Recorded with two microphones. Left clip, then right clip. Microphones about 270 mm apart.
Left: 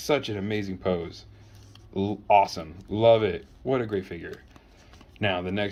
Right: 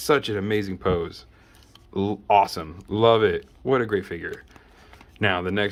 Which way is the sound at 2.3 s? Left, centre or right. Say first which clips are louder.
Right 1 dB; centre.